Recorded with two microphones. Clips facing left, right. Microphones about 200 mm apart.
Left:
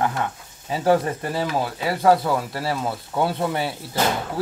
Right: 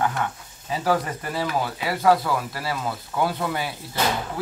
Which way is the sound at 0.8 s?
25° left (ahead or behind).